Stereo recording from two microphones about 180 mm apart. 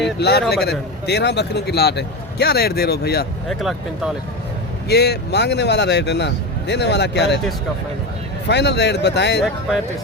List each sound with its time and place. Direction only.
0.2 s a man's voice: 65° left (ahead or behind)
3.5 s speech: centre (ahead or behind)
4.9 s speech: 65° left (ahead or behind)
8.4 s speech: 70° left (ahead or behind)
9.4 s speech: 5° right (ahead or behind)